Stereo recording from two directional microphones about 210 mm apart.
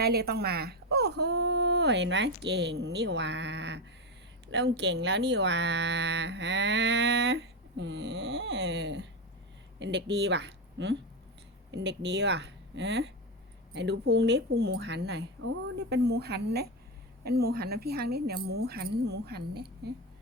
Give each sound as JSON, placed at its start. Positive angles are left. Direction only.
{"t": 0.0, "sound": "a woman's voice", "side_deg": -50}